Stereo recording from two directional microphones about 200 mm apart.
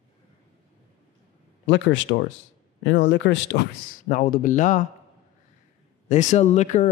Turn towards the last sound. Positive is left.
turn(degrees=35)  # may be behind; listen again after turning